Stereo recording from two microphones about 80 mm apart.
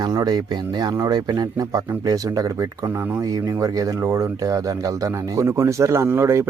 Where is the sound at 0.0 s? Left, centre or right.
Right.